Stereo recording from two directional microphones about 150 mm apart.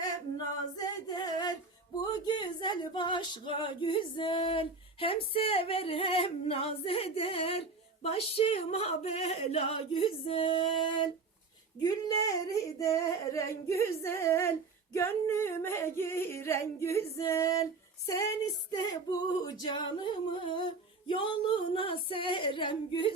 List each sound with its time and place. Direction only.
1.0 s female singing: 25° left (ahead or behind)
2.2 s a sound: 30° left (ahead or behind)
8.0 s singing: 40° left (ahead or behind)
11.8 s female singing: 25° left (ahead or behind)
14.9 s singing: 15° left (ahead or behind)
18.7 s female singing: 25° left (ahead or behind)
19.5 s a sound: 30° left (ahead or behind)